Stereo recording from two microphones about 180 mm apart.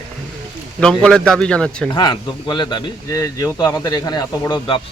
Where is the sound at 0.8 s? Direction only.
5° left (ahead or behind).